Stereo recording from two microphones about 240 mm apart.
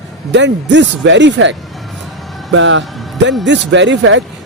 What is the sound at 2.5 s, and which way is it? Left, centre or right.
Speech, right.